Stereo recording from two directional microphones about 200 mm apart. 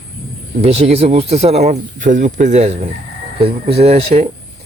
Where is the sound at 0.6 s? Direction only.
30° right (ahead or behind).